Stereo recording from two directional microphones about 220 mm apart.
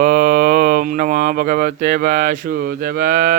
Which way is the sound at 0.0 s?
40° right (ahead or behind).